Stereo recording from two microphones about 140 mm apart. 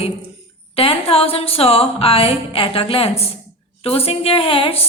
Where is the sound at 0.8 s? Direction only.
40° left (ahead or behind).